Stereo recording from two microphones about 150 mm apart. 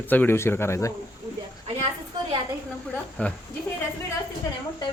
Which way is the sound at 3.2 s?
10° left (ahead or behind).